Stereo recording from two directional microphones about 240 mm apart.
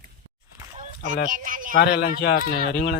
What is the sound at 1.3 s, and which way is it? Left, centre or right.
Speech, right.